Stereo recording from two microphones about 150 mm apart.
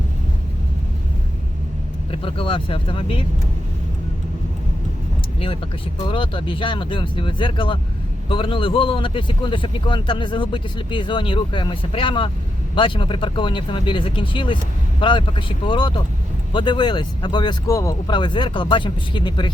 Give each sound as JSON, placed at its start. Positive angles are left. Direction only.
{"t": 2.2, "sound": "a man's voice", "side_deg": 35}
{"t": 6.1, "sound": "a man's voice", "side_deg": 35}